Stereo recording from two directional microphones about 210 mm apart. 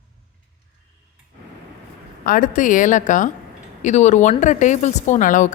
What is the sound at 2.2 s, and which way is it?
Speech, 40° left (ahead or behind).